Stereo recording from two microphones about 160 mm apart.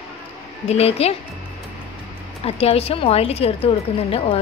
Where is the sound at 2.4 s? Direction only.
35° left (ahead or behind).